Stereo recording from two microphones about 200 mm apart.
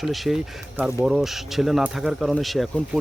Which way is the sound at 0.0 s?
Centre (ahead or behind).